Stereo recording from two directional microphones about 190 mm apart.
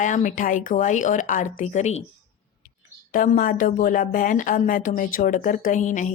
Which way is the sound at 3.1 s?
45° left (ahead or behind).